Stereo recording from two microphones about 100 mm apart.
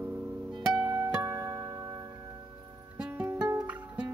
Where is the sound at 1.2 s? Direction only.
30° right (ahead or behind).